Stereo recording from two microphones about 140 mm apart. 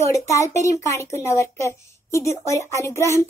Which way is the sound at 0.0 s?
20° left (ahead or behind).